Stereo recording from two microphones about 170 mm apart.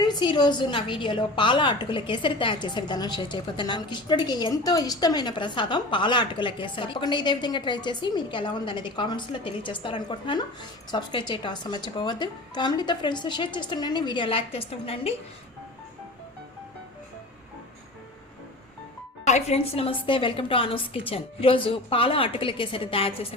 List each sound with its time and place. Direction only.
0.0 s a woman's voice: 25° left (ahead or behind)
19.2 s a woman's voice: 40° left (ahead or behind)